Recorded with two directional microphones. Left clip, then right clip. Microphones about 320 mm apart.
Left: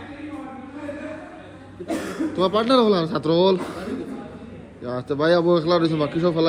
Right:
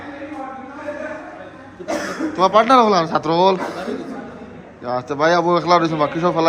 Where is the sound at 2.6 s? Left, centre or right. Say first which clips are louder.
Right 6 dB; centre.